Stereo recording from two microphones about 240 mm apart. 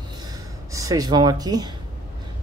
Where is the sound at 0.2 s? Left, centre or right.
Centre.